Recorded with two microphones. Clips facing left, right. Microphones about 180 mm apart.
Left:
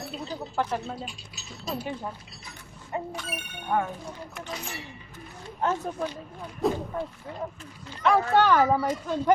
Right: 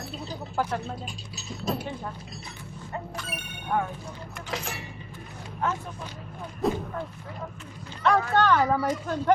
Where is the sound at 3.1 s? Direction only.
Centre (ahead or behind).